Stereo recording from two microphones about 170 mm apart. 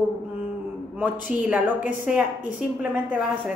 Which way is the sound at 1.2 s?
10° right (ahead or behind).